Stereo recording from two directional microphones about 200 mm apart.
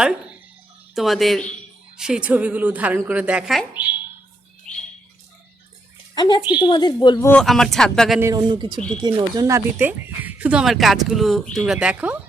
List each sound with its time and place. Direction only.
0.9 s speech: centre (ahead or behind)
6.1 s a woman's voice: 20° left (ahead or behind)
7.3 s speech: 5° left (ahead or behind)
8.2 s speech: 20° right (ahead or behind)